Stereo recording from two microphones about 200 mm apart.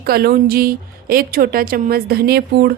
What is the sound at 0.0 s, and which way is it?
A woman's voice, 50° right (ahead or behind).